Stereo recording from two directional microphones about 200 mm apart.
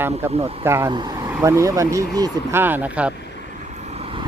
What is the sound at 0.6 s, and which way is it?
Speech, 10° right (ahead or behind).